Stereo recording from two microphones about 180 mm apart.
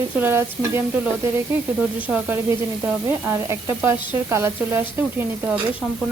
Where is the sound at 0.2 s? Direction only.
10° right (ahead or behind).